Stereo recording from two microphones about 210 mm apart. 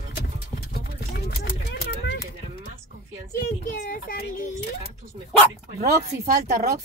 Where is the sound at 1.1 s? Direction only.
50° left (ahead or behind).